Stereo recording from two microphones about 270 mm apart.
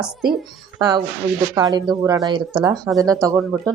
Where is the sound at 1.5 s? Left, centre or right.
Centre.